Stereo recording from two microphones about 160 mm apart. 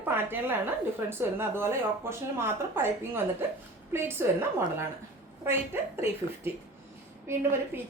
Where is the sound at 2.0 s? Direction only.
15° right (ahead or behind).